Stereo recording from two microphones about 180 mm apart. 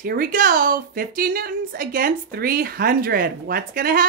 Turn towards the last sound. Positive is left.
turn(degrees=-55)  # may be behind; listen again after turning